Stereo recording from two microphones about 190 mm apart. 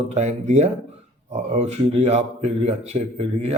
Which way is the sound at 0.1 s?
35° right (ahead or behind).